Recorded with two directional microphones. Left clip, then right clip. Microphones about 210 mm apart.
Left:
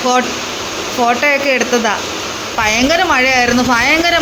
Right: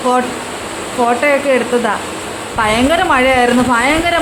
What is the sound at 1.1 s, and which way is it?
Speech, 5° left (ahead or behind).